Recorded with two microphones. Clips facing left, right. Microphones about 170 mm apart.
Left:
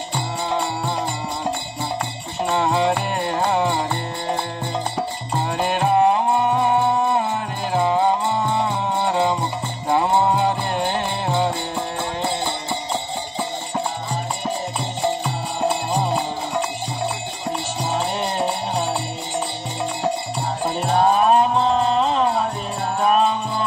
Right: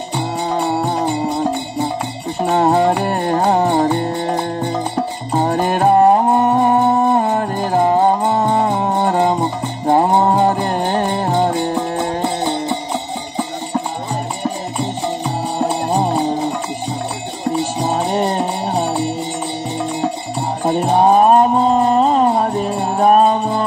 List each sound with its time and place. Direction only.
0.5 s music: 50° right (ahead or behind)
2.5 s music: 45° right (ahead or behind)
5.4 s music: 45° right (ahead or behind)
17.7 s music: 45° right (ahead or behind)
21.1 s music: 40° right (ahead or behind)